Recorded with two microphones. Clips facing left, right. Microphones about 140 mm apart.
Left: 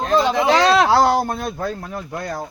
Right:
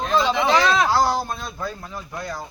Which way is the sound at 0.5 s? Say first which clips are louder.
Left 6 dB; 70° left (ahead or behind).